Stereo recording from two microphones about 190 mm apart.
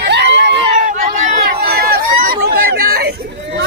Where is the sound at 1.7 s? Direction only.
55° right (ahead or behind).